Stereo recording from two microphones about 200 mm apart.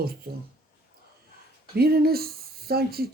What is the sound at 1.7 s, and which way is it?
Speech, 50° right (ahead or behind).